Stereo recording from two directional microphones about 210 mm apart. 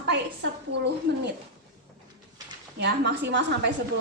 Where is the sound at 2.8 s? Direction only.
55° right (ahead or behind).